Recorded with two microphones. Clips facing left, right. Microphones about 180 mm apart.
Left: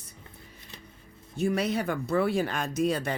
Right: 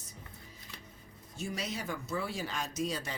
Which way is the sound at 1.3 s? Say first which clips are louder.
Left 11 dB; 60° left (ahead or behind).